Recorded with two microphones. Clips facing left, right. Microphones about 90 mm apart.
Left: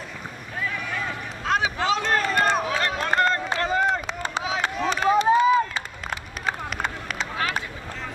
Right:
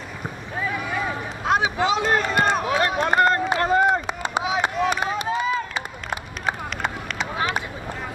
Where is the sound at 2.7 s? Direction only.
15° right (ahead or behind).